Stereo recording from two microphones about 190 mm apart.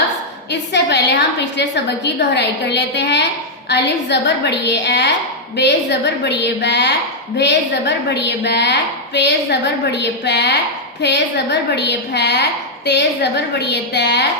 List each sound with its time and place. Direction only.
0.7 s a woman's voice: 65° left (ahead or behind)
11.7 s a woman's voice: 60° left (ahead or behind)